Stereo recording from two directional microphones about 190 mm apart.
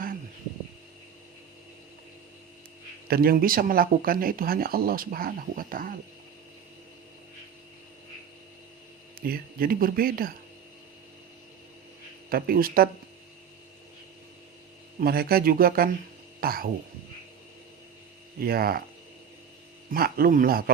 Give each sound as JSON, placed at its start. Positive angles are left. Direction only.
{"t": 3.1, "sound": "speech", "side_deg": -50}
{"t": 9.2, "sound": "speech", "side_deg": -50}
{"t": 12.3, "sound": "speech", "side_deg": -50}
{"t": 15.0, "sound": "speech", "side_deg": -55}
{"t": 18.3, "sound": "speech", "side_deg": -55}
{"t": 19.9, "sound": "speech", "side_deg": -50}